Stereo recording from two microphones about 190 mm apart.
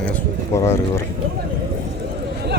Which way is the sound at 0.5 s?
15° left (ahead or behind).